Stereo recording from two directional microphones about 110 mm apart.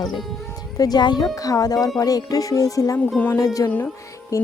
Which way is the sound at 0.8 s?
40° left (ahead or behind).